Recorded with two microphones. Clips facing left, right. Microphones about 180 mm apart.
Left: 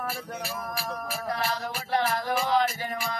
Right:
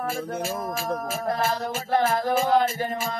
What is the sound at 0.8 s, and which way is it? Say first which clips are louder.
Music: right 6 dB; 50° right (ahead or behind).